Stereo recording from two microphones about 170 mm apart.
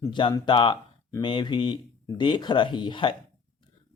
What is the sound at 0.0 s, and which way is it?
Speech, 30° left (ahead or behind).